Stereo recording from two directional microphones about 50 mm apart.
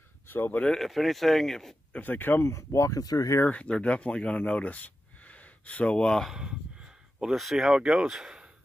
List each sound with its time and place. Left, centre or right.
0.3 s speech: left
0.7 s speech: centre
1.9 s speech: left
2.4 s speech: left
3.4 s speech: left
6.3 s speech: centre
7.3 s speech: centre